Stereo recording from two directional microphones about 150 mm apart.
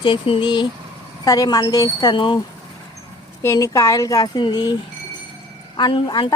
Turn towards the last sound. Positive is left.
turn(degrees=30)  # may be behind; listen again after turning